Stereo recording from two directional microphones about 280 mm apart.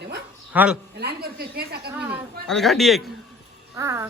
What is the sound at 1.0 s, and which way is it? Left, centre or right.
Speech, right.